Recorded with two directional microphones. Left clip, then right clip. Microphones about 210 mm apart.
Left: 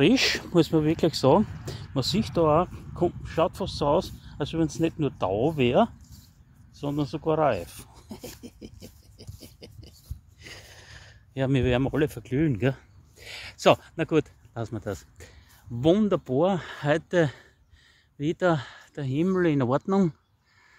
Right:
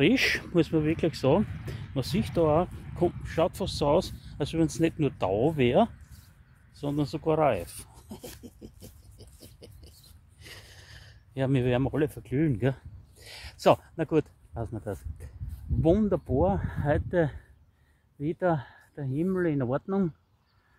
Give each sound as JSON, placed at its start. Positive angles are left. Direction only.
{"t": 0.0, "sound": "speech", "side_deg": 25}
{"t": 6.7, "sound": "writing", "side_deg": 10}
{"t": 10.4, "sound": "a sound", "side_deg": 15}
{"t": 15.8, "sound": "speech", "side_deg": 25}